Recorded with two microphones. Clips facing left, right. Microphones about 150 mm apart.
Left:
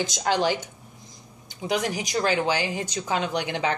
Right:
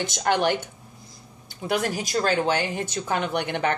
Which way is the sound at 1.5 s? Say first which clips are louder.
Right 1 dB; 15° left (ahead or behind).